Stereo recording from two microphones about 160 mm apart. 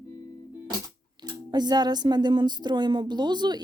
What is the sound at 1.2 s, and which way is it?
Speech, 25° right (ahead or behind).